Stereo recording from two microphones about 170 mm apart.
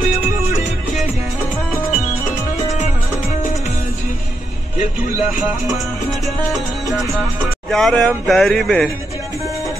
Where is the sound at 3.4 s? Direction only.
40° left (ahead or behind).